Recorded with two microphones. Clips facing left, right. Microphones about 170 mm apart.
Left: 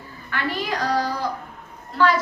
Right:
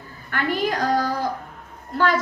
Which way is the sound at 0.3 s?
50° right (ahead or behind).